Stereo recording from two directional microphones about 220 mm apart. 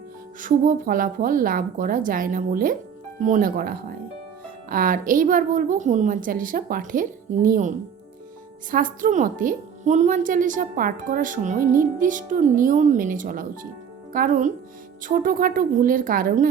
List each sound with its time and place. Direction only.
0.3 s a woman's voice: 40° right (ahead or behind)
8.7 s a woman's voice: 40° right (ahead or behind)